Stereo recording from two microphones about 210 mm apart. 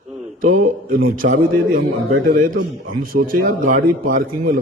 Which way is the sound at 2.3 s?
40° right (ahead or behind).